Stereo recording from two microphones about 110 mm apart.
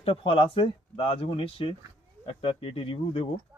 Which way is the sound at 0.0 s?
55° left (ahead or behind).